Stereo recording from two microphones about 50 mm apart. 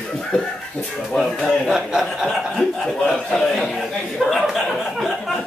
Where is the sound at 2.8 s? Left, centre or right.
Centre.